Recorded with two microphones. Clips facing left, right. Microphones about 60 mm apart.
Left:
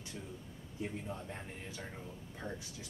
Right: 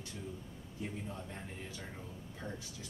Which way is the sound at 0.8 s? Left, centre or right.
Centre.